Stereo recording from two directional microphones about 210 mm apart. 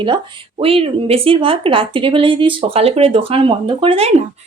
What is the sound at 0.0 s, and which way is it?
Speech, 25° right (ahead or behind).